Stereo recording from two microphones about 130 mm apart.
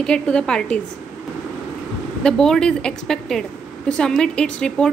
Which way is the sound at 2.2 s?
5° left (ahead or behind).